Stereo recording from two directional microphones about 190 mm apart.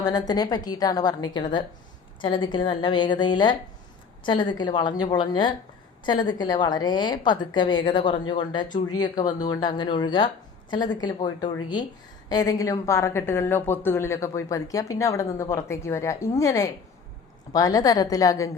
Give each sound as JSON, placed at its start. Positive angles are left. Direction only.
{"t": 0.0, "sound": "a woman's voice", "side_deg": 20}